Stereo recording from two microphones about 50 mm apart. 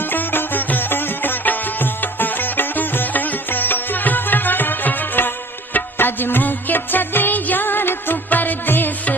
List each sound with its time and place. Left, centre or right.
0.1 s music: left